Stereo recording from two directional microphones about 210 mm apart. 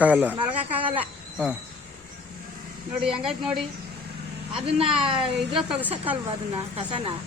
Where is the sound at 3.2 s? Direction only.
5° right (ahead or behind).